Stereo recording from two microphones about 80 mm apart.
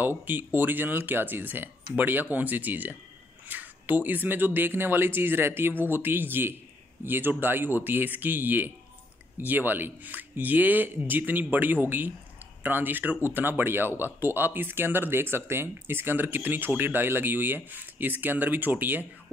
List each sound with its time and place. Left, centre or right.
0.2 s speech: right